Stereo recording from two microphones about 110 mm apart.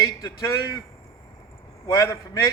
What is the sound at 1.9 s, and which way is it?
Speech, 25° left (ahead or behind).